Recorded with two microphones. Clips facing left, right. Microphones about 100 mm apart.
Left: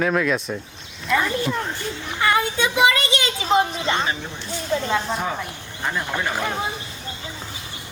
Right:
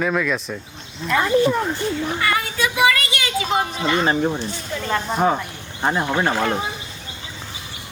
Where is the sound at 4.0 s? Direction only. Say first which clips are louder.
Right 7 dB; 45° right (ahead or behind).